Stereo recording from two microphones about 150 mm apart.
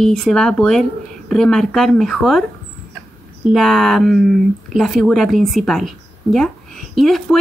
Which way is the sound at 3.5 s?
Centre (ahead or behind).